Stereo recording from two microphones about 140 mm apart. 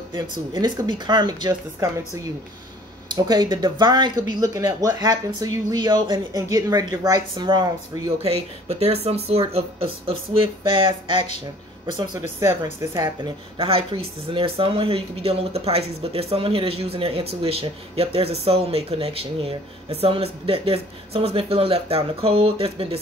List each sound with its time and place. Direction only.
0.1 s speech: 35° right (ahead or behind)
3.3 s speech: 30° right (ahead or behind)
8.2 s speech: 50° right (ahead or behind)